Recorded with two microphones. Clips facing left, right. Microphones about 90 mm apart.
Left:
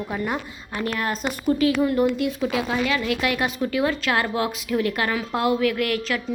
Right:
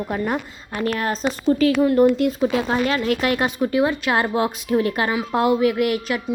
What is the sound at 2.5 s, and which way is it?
A woman's voice, 40° right (ahead or behind).